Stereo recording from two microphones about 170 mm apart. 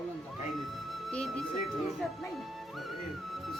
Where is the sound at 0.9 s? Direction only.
Centre (ahead or behind).